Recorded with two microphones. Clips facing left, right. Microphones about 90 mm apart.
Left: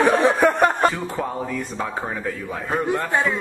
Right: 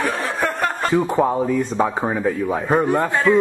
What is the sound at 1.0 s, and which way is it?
A man's voice, 30° right (ahead or behind).